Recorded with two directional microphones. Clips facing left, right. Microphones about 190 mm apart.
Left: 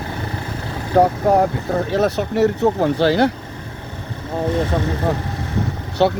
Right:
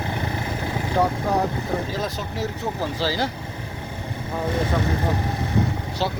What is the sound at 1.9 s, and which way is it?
Speech, 70° left (ahead or behind).